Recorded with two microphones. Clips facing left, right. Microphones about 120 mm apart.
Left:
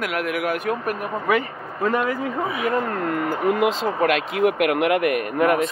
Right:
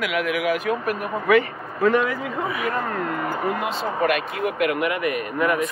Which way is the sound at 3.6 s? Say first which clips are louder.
Left 3 dB; 90° left.